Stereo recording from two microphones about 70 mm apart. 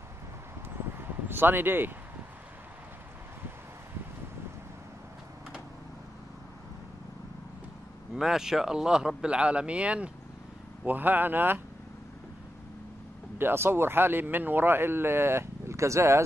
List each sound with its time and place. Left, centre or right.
0.9 s a sound: right
8.1 s speech: centre; by 11.6 s right
13.4 s a man's voice: right